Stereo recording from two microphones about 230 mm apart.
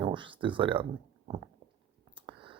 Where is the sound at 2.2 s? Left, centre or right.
Right.